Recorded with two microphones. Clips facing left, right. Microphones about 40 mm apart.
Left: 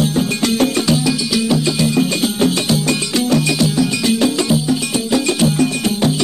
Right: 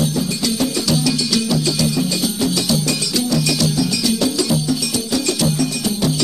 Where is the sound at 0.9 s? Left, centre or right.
Left.